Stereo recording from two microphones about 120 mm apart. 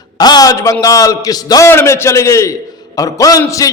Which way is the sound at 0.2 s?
35° left (ahead or behind).